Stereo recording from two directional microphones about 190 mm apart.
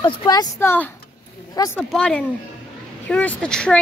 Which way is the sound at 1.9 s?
5° left (ahead or behind).